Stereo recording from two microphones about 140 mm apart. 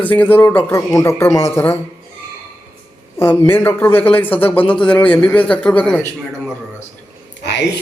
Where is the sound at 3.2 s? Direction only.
15° left (ahead or behind).